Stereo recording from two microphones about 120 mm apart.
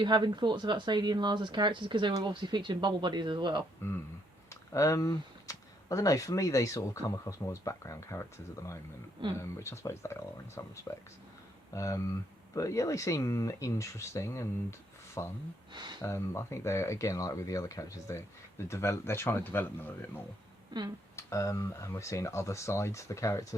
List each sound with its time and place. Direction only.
0.0 s speech: 40° right (ahead or behind)
3.8 s speech: 20° left (ahead or behind)
15.7 s speech: 40° right (ahead or behind)
16.0 s speech: 25° left (ahead or behind)
21.2 s speech: 25° left (ahead or behind)